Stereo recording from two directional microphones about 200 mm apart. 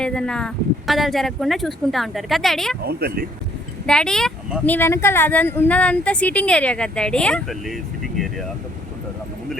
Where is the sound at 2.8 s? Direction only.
50° right (ahead or behind).